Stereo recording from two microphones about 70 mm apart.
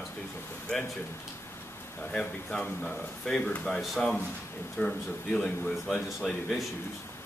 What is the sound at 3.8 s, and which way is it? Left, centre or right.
Speech, centre.